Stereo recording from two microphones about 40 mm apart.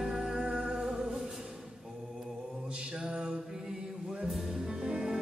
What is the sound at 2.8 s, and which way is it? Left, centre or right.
Mantra, centre.